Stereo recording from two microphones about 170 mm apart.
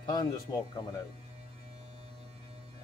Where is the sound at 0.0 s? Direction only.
25° left (ahead or behind).